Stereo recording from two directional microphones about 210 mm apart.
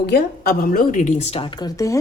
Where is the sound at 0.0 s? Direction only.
45° left (ahead or behind).